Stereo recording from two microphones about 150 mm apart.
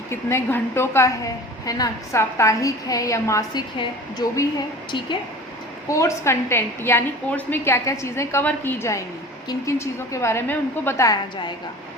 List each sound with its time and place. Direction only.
0.1 s a woman's voice: 15° left (ahead or behind)
5.9 s a woman's voice: 20° left (ahead or behind)